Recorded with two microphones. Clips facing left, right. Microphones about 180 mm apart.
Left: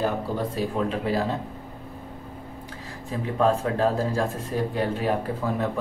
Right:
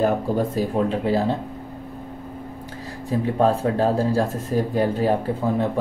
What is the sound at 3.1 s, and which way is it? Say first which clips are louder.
Speech: right 3 dB; 35° right (ahead or behind).